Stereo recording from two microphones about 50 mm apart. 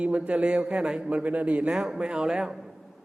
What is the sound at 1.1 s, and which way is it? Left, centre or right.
A man's voice, right.